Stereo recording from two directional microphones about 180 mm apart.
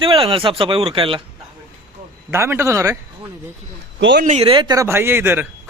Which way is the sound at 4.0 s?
80° right.